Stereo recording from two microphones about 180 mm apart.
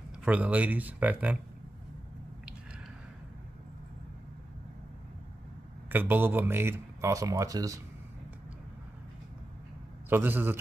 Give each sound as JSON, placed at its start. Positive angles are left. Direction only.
{"t": 0.2, "sound": "speech", "side_deg": -10}
{"t": 5.9, "sound": "speech", "side_deg": -10}
{"t": 10.0, "sound": "speech", "side_deg": -10}